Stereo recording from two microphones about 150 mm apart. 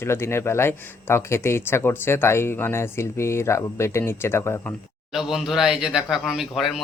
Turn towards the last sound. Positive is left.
turn(degrees=0)  # may be behind; listen again after turning